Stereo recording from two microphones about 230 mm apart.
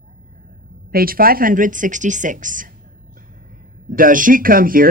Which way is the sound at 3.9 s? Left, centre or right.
Right.